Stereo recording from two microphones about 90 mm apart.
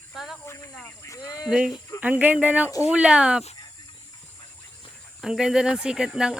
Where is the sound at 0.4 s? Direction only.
35° left (ahead or behind).